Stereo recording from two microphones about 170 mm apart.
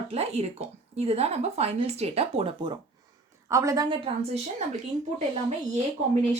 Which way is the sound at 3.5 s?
20° right (ahead or behind).